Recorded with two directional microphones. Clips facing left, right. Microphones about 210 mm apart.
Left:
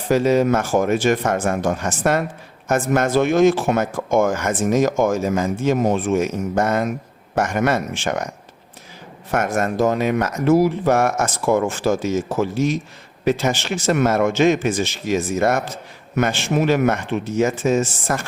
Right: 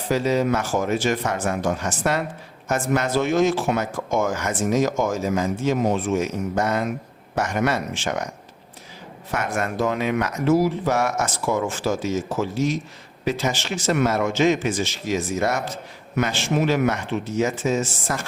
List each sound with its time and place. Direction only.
0.1 s speech: 50° left (ahead or behind)
9.3 s speech: 45° left (ahead or behind)